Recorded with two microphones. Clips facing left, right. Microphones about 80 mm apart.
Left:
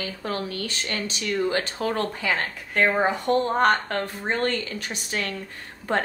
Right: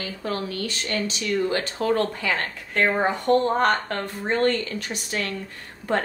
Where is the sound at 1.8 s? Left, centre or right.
Centre.